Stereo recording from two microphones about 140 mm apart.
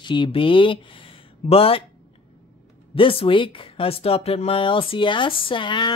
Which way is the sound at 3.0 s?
40° left (ahead or behind).